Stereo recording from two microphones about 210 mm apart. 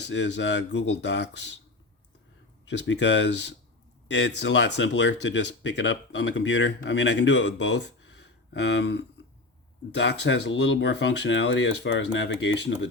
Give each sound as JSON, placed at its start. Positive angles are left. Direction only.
{"t": 0.1, "sound": "speech", "side_deg": 55}
{"t": 2.6, "sound": "speech", "side_deg": 55}